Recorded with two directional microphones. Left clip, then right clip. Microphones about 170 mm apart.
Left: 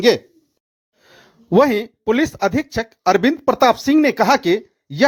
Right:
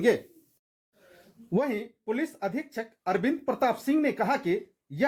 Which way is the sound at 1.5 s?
45° left (ahead or behind).